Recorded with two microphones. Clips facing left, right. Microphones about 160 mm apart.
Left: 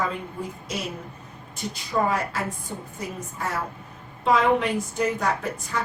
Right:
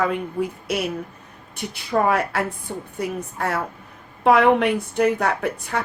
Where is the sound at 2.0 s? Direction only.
65° right (ahead or behind).